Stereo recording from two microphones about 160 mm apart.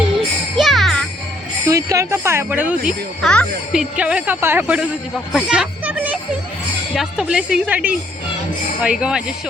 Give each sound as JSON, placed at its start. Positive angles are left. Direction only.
{"t": 0.5, "sound": "music", "side_deg": 0}
{"t": 1.6, "sound": "speech", "side_deg": -20}
{"t": 3.2, "sound": "speech", "side_deg": 5}
{"t": 5.3, "sound": "music", "side_deg": -5}
{"t": 6.9, "sound": "speech", "side_deg": -5}